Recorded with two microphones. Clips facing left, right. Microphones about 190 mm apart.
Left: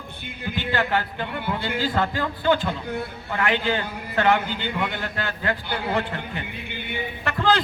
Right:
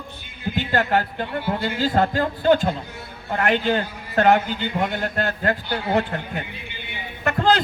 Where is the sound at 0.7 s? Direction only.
45° right (ahead or behind).